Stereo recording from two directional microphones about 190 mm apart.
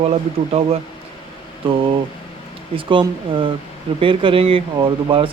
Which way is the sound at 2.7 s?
25° right (ahead or behind).